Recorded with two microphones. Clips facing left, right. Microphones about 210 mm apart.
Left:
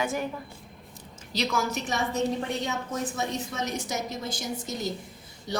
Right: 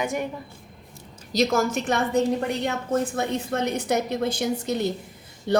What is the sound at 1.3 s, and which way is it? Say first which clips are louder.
A woman's voice: right 7 dB; 40° right (ahead or behind).